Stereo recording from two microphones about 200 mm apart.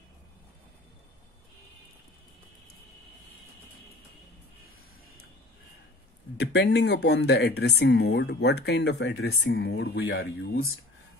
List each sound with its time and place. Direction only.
6.3 s speech: 55° left (ahead or behind)
9.4 s speech: 50° left (ahead or behind)